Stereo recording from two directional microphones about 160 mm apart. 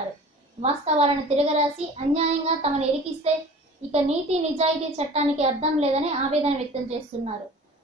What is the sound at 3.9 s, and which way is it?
A woman's voice, 40° right (ahead or behind).